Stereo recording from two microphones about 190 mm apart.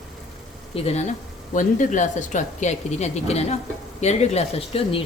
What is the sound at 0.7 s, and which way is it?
A woman's voice, 30° left (ahead or behind).